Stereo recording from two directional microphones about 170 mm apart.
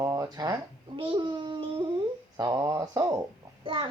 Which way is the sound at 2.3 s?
20° right (ahead or behind).